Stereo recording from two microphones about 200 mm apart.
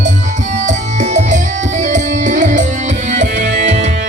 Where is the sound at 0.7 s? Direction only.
35° right (ahead or behind).